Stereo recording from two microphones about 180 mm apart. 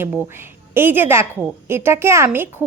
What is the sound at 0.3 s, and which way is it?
A woman's voice, 15° right (ahead or behind).